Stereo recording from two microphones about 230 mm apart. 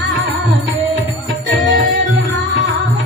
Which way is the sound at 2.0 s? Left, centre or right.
Right.